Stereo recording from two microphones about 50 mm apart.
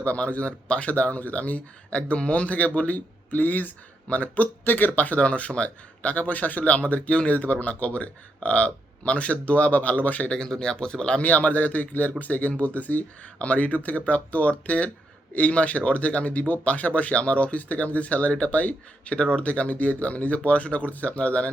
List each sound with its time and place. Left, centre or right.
0.0 s speech: left
4.6 s speech: left
4.9 s speech: left
10.2 s speech: centre